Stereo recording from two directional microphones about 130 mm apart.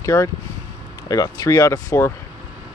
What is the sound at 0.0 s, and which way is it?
Speech, 25° left (ahead or behind).